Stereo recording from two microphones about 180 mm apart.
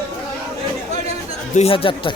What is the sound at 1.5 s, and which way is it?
Speech, 30° left (ahead or behind).